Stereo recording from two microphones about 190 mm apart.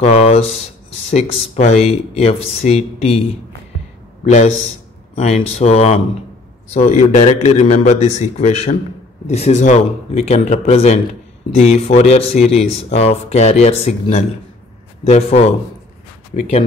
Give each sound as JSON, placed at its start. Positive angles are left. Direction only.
{"t": 0.0, "sound": "speech", "side_deg": 35}
{"t": 4.2, "sound": "a man's voice", "side_deg": 35}